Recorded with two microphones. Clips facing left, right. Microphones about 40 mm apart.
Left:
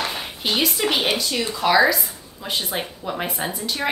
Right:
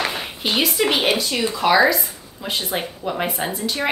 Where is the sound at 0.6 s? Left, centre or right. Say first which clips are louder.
Right 3 dB; centre.